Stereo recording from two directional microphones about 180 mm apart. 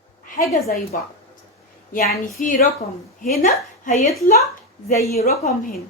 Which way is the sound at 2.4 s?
50° left (ahead or behind).